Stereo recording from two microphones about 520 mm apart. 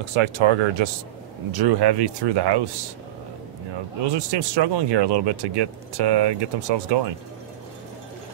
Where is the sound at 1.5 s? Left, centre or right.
Right.